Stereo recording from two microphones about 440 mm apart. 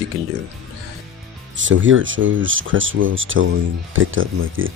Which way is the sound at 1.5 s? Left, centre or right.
Right.